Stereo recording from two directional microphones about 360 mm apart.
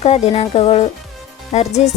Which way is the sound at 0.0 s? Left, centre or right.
Centre.